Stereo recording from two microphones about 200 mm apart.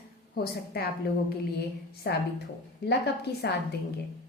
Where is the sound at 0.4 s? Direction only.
50° left (ahead or behind).